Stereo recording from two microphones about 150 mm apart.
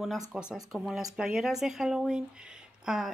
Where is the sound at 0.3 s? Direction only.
5° right (ahead or behind).